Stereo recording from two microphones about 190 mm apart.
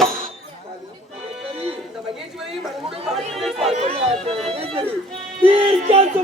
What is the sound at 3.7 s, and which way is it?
Music, 35° right (ahead or behind).